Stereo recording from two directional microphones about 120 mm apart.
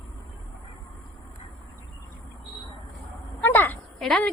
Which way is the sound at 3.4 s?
15° left (ahead or behind).